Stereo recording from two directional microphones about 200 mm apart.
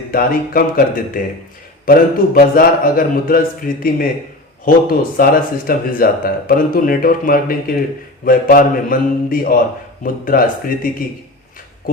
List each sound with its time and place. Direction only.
0.1 s speech: 45° left (ahead or behind)